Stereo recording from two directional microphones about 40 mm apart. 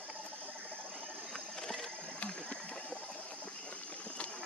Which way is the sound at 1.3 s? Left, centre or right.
Centre.